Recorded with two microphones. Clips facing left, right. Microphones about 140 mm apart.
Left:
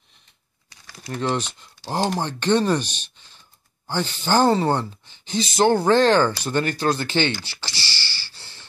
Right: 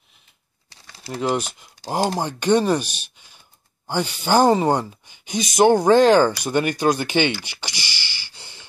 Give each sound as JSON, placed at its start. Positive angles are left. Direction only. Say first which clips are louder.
{"t": 0.7, "sound": "crumpling", "louder": "even", "side_deg": -30}
{"t": 1.1, "sound": "speech", "louder": "right 2 dB", "side_deg": -10}
{"t": 6.4, "sound": "a sound", "louder": "right 3 dB", "side_deg": -15}